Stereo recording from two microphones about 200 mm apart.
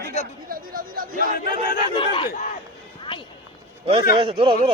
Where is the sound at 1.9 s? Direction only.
25° left (ahead or behind).